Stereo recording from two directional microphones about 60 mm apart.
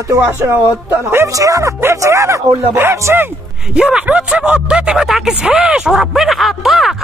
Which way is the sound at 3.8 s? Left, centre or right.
Centre.